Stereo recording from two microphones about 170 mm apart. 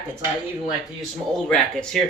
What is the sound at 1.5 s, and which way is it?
Speech, 5° left (ahead or behind).